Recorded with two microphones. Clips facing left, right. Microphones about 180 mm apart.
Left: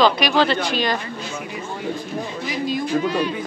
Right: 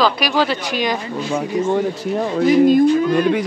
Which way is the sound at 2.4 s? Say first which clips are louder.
Right 14 dB; 50° right (ahead or behind).